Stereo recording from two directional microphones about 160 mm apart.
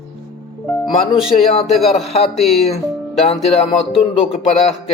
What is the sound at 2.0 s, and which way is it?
Speech, 40° left (ahead or behind).